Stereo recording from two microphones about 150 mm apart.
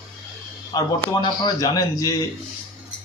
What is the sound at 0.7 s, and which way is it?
A man's voice, 25° left (ahead or behind).